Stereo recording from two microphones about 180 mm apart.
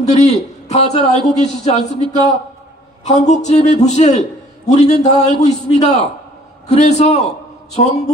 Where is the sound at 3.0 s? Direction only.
40° left (ahead or behind).